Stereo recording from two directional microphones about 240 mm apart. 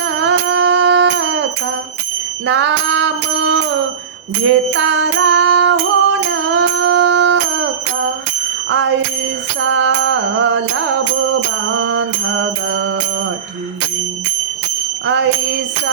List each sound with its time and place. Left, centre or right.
0.3 s a sound: right
2.5 s music: right
9.6 s music: right